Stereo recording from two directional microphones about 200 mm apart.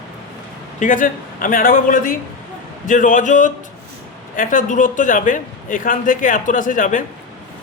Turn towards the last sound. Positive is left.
turn(degrees=40)  # may be behind; listen again after turning